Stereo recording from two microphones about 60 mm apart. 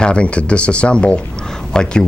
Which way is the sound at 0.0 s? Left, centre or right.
Centre.